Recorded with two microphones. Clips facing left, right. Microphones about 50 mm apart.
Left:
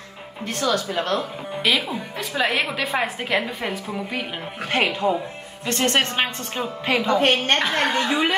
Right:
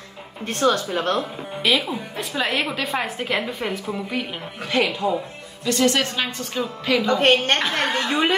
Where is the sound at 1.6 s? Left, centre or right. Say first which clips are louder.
Right 1 dB; centre.